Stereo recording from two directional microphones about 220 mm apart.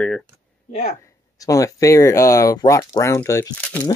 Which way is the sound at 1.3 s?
15° left (ahead or behind).